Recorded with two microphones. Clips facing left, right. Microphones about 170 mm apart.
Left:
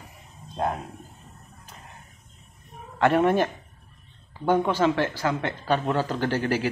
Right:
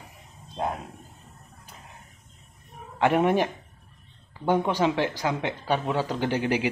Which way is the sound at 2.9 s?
15° right (ahead or behind).